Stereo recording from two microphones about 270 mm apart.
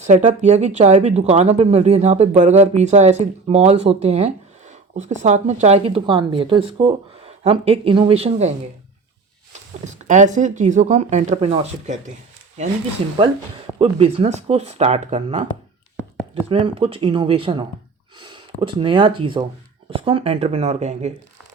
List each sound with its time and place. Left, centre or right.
0.0 s speech: right
9.8 s speech: right
13.7 s speech: right